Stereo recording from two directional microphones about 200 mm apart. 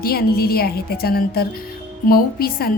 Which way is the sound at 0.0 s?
50° left (ahead or behind).